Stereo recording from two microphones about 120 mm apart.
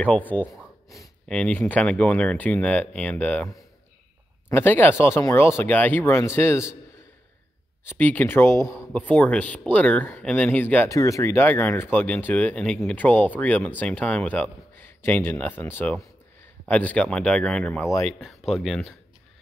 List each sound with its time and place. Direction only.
0.0 s speech: 10° left (ahead or behind)
4.5 s speech: 20° left (ahead or behind)
7.8 s speech: 15° left (ahead or behind)
8.9 s speech: 15° left (ahead or behind)
10.9 s speech: 25° left (ahead or behind); by 18.9 s 5° left (ahead or behind)